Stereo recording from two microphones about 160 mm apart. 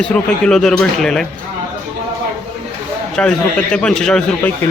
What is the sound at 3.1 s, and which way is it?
A man's voice, 5° left (ahead or behind).